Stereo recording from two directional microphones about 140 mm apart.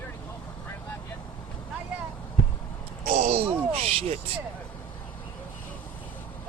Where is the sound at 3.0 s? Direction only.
60° right (ahead or behind).